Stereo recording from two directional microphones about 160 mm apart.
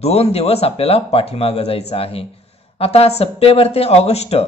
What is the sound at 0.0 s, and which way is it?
Speech, 40° left (ahead or behind).